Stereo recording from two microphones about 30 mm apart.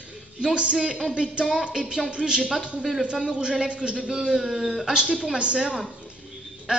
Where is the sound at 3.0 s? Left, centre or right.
Right.